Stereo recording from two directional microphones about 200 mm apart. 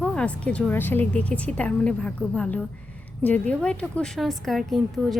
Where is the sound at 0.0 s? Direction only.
5° left (ahead or behind).